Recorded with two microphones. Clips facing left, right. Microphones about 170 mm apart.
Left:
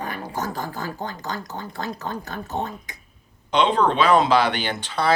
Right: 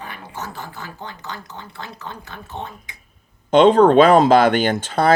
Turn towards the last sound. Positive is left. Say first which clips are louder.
# right 5 dB
turn(degrees=-50)  # may be behind; listen again after turning